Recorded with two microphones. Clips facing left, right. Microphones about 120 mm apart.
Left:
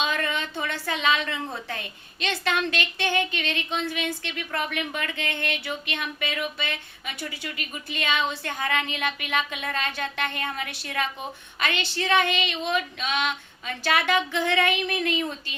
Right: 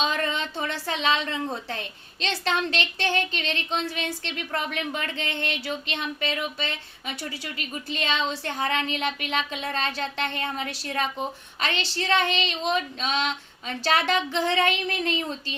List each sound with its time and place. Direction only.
0.0 s a woman's voice: 30° right (ahead or behind)
3.3 s child singing: 30° right (ahead or behind)
4.7 s speech: 30° right (ahead or behind)
7.2 s child singing: 35° right (ahead or behind)
8.9 s speech: 30° right (ahead or behind)
11.6 s child singing: 35° right (ahead or behind)